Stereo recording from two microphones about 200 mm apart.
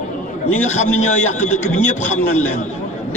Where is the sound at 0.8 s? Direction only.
35° left (ahead or behind).